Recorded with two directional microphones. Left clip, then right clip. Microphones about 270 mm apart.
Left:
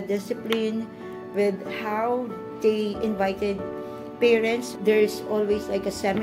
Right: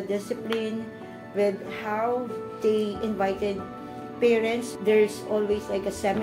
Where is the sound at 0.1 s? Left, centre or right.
Left.